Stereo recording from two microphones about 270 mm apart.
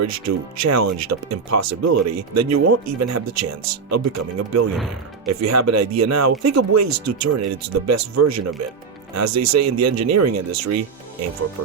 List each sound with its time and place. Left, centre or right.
0.0 s speech: right